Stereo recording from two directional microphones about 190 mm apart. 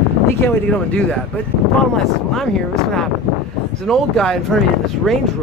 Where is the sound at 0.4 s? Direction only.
10° left (ahead or behind).